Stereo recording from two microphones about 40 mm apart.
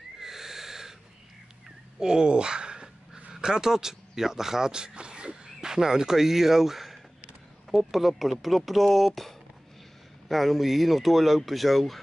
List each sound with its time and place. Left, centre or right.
0.2 s owl: centre
2.0 s speech: centre